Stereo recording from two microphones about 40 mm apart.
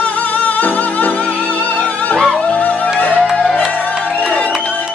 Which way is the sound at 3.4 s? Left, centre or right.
Centre.